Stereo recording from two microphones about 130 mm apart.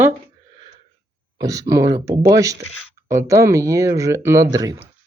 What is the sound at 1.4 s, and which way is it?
Speech, 25° right (ahead or behind).